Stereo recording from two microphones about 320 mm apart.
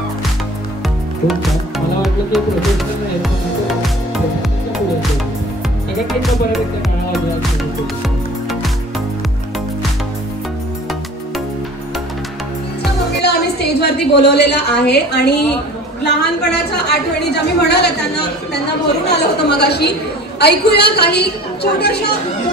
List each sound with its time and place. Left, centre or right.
1.2 s music: centre
13.2 s a woman's voice: left